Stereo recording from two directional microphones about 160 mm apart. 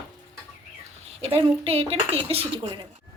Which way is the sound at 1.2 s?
40° right (ahead or behind).